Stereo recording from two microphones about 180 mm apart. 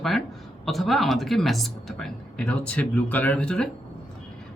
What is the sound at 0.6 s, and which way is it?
Speech, centre (ahead or behind).